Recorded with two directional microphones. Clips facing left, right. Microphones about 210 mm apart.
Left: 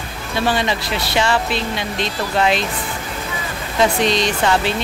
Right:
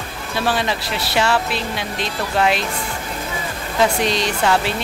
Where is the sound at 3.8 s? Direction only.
10° right (ahead or behind).